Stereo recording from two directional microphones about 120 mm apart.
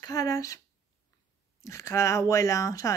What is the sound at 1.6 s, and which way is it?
Speech, 25° left (ahead or behind).